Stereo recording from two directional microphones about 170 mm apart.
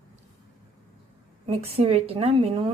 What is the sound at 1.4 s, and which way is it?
A woman's voice, 35° right (ahead or behind).